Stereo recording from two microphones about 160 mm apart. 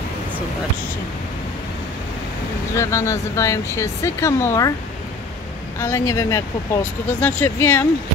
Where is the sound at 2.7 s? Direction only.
20° left (ahead or behind).